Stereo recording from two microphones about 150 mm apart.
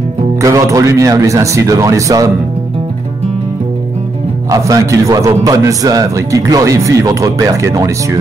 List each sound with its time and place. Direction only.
0.4 s a man's voice: 20° right (ahead or behind)
4.5 s a man's voice: 20° right (ahead or behind)